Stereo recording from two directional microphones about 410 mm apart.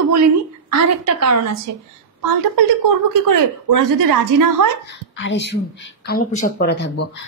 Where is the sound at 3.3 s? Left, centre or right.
Right.